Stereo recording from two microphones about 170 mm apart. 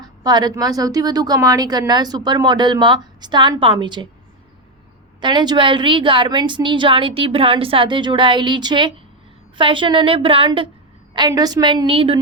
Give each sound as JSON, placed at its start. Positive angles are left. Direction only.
{"t": 0.0, "sound": "a woman's voice", "side_deg": -25}
{"t": 5.2, "sound": "a woman's voice", "side_deg": -25}